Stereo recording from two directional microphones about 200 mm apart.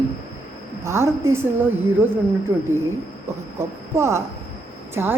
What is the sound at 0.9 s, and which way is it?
Speech, 15° right (ahead or behind).